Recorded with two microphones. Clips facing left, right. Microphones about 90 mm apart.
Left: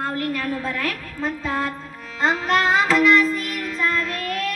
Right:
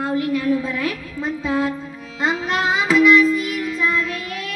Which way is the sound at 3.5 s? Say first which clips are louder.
Right 3 dB; 50° left (ahead or behind).